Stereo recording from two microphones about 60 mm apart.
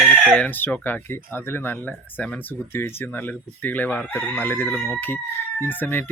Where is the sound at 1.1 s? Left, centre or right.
Left.